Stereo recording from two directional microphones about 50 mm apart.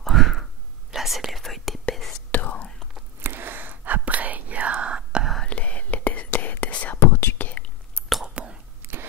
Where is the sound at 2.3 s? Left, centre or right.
Left.